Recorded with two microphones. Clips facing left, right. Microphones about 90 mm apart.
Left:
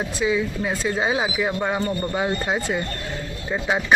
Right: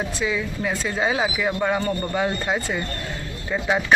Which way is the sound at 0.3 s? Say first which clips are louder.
Left 5 dB; 15° left (ahead or behind).